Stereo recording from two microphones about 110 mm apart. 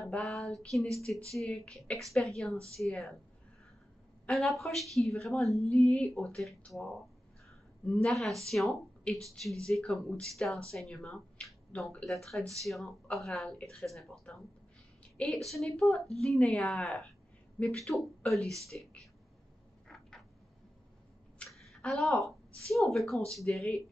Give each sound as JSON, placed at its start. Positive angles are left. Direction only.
{"t": 0.1, "sound": "a woman's voice", "side_deg": 0}
{"t": 2.5, "sound": "speech", "side_deg": -25}
{"t": 2.8, "sound": "a woman's voice", "side_deg": 0}
{"t": 4.3, "sound": "a woman's voice", "side_deg": 0}
{"t": 18.7, "sound": "speech", "side_deg": 10}
{"t": 21.5, "sound": "a woman's voice", "side_deg": 0}